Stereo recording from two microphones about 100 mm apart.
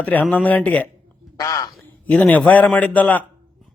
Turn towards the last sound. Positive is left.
turn(degrees=15)  # may be behind; listen again after turning